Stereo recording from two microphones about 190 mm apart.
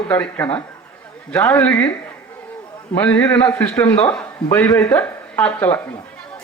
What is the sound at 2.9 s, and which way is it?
A man's voice, 10° left (ahead or behind).